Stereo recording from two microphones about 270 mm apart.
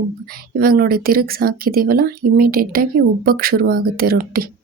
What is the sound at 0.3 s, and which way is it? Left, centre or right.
Speech, right.